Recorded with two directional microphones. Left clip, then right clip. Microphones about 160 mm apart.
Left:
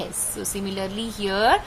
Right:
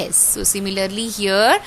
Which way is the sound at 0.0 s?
45° right (ahead or behind).